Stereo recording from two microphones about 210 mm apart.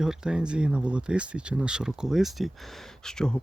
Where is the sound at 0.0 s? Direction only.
5° right (ahead or behind).